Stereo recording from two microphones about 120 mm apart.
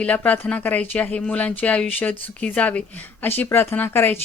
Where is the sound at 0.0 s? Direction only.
10° left (ahead or behind).